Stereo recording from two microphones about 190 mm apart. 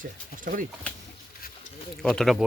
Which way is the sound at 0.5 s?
45° right (ahead or behind).